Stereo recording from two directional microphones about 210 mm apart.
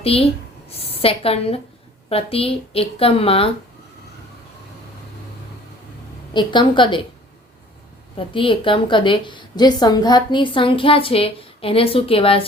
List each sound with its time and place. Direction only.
0.0 s a woman's voice: 25° left (ahead or behind)
6.3 s a woman's voice: 20° left (ahead or behind)
8.3 s a woman's voice: 25° left (ahead or behind)